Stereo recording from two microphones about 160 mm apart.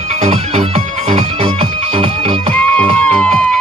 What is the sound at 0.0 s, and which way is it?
Music, 45° right (ahead or behind).